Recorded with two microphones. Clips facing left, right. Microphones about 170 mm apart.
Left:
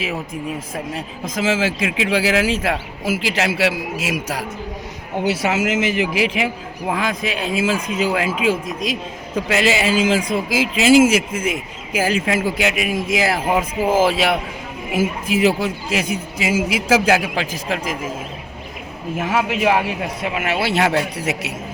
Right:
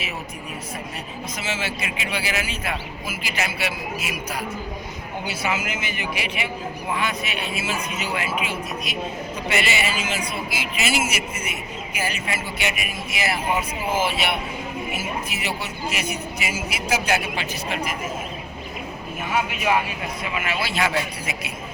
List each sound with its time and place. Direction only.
1.2 s a man's voice: 90° left
19.1 s a man's voice: 90° left
20.2 s a man's voice: 65° left (ahead or behind)